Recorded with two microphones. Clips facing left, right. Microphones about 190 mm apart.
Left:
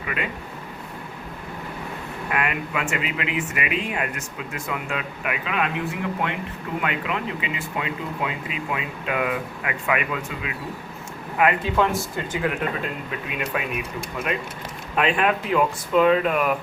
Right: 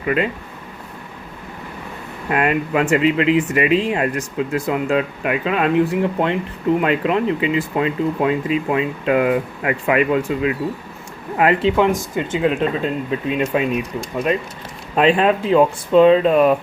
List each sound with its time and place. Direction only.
2.3 s speech: 35° right (ahead or behind)
11.8 s speech: 15° right (ahead or behind)
14.9 s speech: 30° right (ahead or behind)